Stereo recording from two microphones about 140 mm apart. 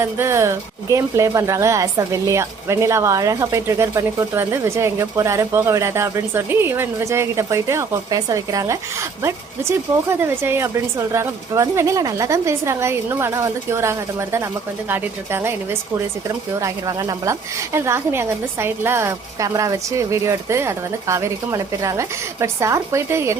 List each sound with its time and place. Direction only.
0.0 s speech: 20° right (ahead or behind)